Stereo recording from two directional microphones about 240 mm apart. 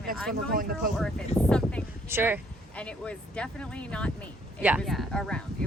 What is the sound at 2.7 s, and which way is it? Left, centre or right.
Speech, centre.